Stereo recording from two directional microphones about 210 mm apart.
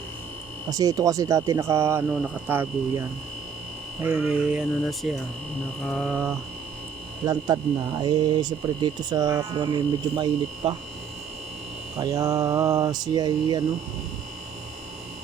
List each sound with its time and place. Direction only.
0.7 s speech: 15° right (ahead or behind)
4.0 s hum: 5° right (ahead or behind)
7.3 s speech: 20° right (ahead or behind)
11.9 s speech: 15° right (ahead or behind)